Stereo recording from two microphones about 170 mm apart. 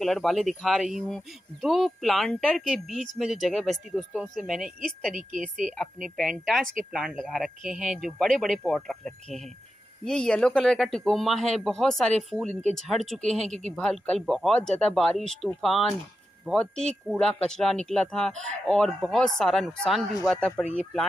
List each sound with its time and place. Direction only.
0.0 s speech: centre (ahead or behind)
5.1 s a woman's voice: 50° right (ahead or behind)
6.1 s speech: centre (ahead or behind)